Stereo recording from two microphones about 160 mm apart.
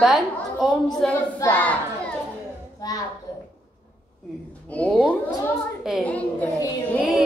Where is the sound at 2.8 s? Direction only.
20° left (ahead or behind).